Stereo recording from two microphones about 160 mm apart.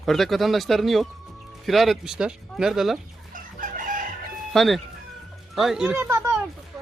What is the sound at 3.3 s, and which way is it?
Chicken, 60° right (ahead or behind).